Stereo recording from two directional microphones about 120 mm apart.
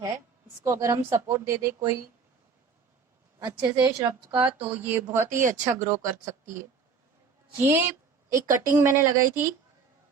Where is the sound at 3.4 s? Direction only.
35° right (ahead or behind).